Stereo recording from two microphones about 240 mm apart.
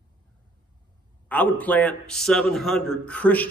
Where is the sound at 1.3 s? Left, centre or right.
Centre.